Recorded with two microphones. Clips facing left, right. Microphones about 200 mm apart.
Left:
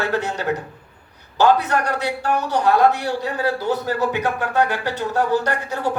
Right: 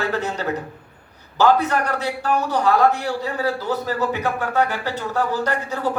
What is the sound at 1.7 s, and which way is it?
A man's voice, 20° left (ahead or behind).